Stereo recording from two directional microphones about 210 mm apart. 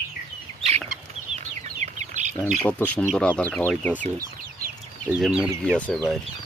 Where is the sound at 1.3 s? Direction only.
35° right (ahead or behind).